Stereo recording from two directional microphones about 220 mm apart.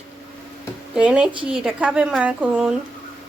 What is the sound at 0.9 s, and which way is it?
A woman's voice, 5° right (ahead or behind).